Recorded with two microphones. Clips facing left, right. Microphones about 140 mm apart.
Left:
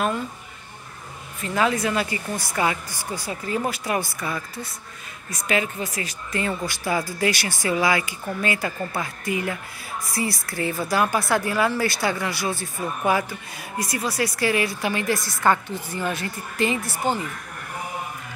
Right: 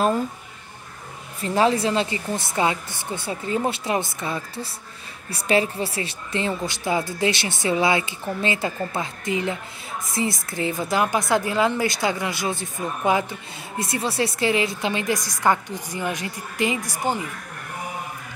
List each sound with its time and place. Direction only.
1.4 s a woman's voice: 30° right (ahead or behind); by 17.3 s 15° right (ahead or behind)